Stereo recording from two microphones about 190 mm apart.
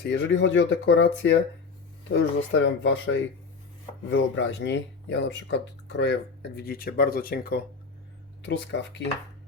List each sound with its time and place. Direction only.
0.0 s speech: 70° left (ahead or behind)
6.6 s speech: 50° left (ahead or behind)
8.4 s speech: 65° left (ahead or behind)